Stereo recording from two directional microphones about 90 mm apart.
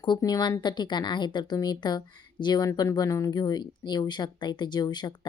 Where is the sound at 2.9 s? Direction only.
40° left (ahead or behind).